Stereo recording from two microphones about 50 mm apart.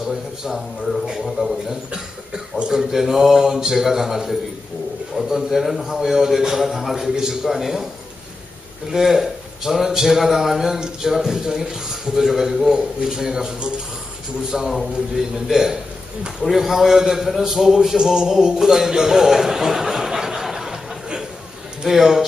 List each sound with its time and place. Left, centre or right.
0.4 s a man's voice: centre
8.9 s a man's voice: centre